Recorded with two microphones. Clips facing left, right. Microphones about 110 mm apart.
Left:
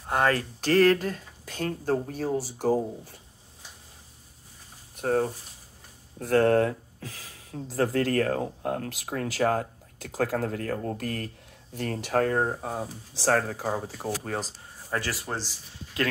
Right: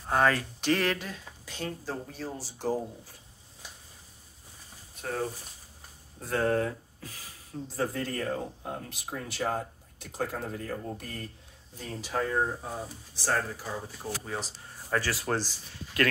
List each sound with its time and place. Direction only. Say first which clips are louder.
0.2 s speech: left 2 dB; 40° left (ahead or behind)
4.9 s a sound: left 10 dB; 45° left (ahead or behind)
6.2 s speech: left 6 dB; 75° left (ahead or behind); by 11.2 s 90° left
11.7 s speech: left 7 dB; 65° left (ahead or behind)
13.1 s speech: left 6 dB; 90° left; by 14.4 s 65° left (ahead or behind)
15.1 s speech: right 3 dB; centre (ahead or behind)
16.0 s speech: right 1 dB; 20° left (ahead or behind)